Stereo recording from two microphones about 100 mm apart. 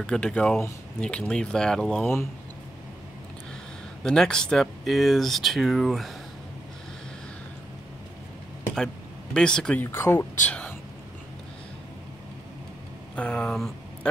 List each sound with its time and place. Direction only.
0.0 s speech: 10° left (ahead or behind)
4.0 s speech: 5° left (ahead or behind)
8.7 s speech: 5° left (ahead or behind)
9.8 s speech: 25° left (ahead or behind)
13.1 s speech: 10° left (ahead or behind)